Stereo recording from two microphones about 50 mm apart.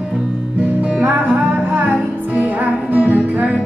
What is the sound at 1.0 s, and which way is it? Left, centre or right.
Music, right.